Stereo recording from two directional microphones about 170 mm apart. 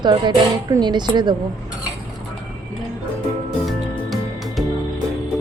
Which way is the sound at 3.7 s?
Centre (ahead or behind).